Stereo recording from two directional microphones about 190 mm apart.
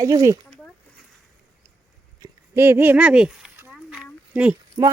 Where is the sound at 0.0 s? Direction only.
20° right (ahead or behind).